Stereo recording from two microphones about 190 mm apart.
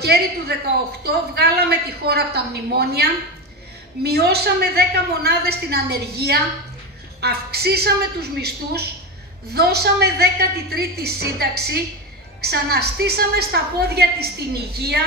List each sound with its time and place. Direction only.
0.0 s a woman's voice: 55° right (ahead or behind)